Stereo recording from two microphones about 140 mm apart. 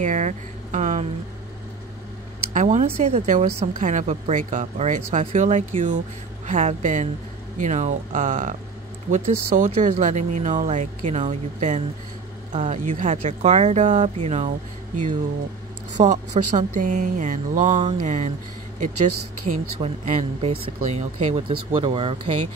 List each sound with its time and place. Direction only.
0.0 s music: 60° right (ahead or behind)
2.5 s a woman's voice: 55° right (ahead or behind)
13.2 s speech: 50° right (ahead or behind)
16.0 s a woman's voice: 60° right (ahead or behind)
19.8 s speech: 50° right (ahead or behind)
21.5 s speech: 40° right (ahead or behind)